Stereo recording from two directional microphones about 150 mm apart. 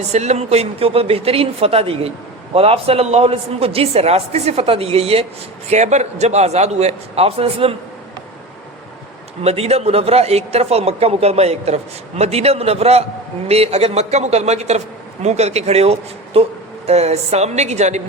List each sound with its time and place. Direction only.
0.1 s a man's voice: 45° right (ahead or behind)
9.4 s a man's voice: 45° right (ahead or behind)